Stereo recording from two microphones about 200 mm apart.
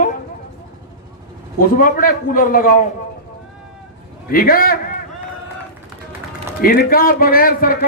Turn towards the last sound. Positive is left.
turn(degrees=45)  # may be behind; listen again after turning